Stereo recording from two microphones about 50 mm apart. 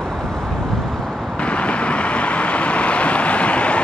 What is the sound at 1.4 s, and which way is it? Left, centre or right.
Vehicle, left.